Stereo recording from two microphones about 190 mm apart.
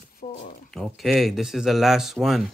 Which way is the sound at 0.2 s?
40° left (ahead or behind).